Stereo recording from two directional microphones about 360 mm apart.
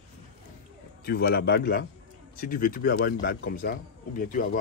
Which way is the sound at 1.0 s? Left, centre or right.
Left.